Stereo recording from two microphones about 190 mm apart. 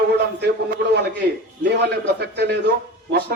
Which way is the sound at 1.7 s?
60° right (ahead or behind).